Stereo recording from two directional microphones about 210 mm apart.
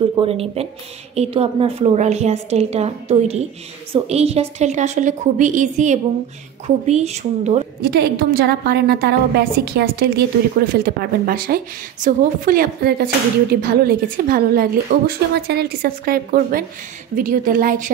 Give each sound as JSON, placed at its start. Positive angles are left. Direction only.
{"t": 0.2, "sound": "a woman's voice", "side_deg": -30}
{"t": 7.8, "sound": "a woman's voice", "side_deg": -50}